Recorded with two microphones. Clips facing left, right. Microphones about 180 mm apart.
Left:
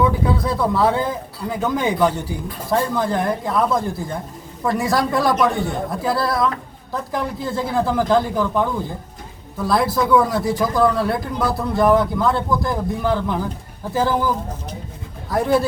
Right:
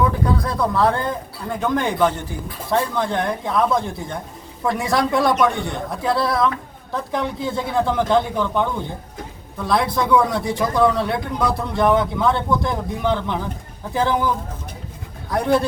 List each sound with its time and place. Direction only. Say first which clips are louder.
0.0 s a man's voice: left 1 dB; centre (ahead or behind)